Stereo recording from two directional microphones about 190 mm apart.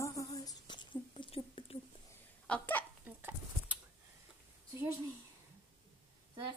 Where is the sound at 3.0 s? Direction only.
10° right (ahead or behind).